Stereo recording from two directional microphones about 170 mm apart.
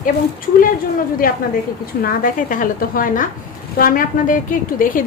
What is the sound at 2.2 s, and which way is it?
A woman's voice, 50° left (ahead or behind).